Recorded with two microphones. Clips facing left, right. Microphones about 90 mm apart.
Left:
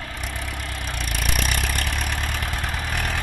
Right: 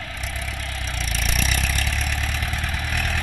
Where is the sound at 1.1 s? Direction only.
55° left (ahead or behind).